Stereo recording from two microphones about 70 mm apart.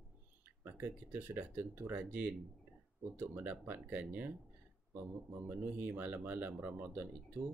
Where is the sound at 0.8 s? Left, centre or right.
Right.